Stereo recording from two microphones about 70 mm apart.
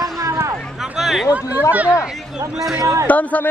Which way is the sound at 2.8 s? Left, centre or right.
Right.